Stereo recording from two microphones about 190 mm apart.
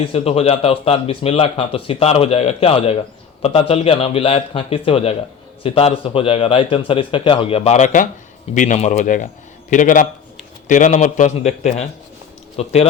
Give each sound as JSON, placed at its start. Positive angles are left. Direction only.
{"t": 0.0, "sound": "a man's voice", "side_deg": 30}